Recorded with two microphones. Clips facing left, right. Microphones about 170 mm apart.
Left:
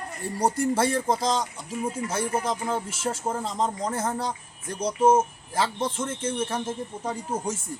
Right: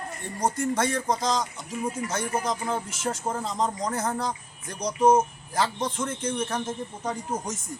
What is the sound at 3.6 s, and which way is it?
Speech, 25° left (ahead or behind).